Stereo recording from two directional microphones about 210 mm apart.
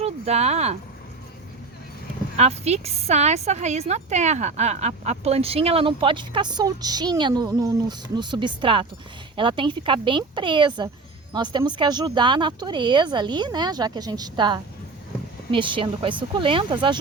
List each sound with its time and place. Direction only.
0.0 s speech: 30° right (ahead or behind)
2.3 s a woman's voice: 30° right (ahead or behind)